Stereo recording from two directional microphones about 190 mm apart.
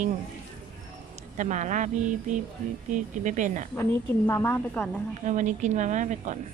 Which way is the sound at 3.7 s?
10° left (ahead or behind).